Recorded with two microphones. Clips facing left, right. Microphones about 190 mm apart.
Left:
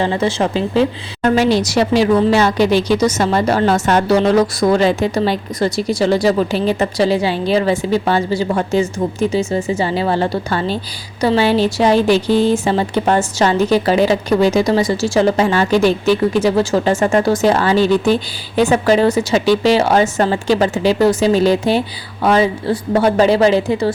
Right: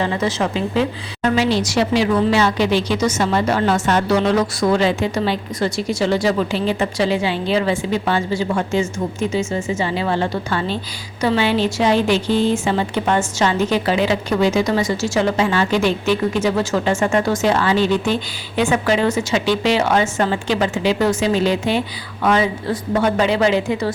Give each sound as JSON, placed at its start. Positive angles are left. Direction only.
{"t": 0.0, "sound": "a woman's voice", "side_deg": 30}